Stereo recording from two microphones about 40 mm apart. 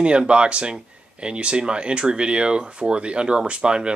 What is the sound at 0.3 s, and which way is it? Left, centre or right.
Speech, right.